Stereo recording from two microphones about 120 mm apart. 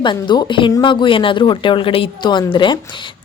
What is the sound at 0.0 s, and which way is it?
A woman's voice, 40° left (ahead or behind).